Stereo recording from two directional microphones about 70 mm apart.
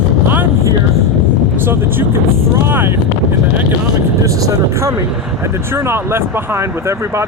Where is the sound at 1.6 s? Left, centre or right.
Right.